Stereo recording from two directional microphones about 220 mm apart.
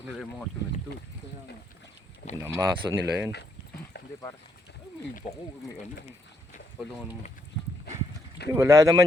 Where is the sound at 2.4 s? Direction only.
10° right (ahead or behind).